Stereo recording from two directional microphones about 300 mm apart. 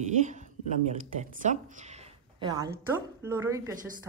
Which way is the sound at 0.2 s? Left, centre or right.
Right.